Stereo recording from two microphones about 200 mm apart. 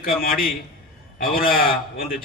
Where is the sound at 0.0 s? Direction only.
45° left (ahead or behind).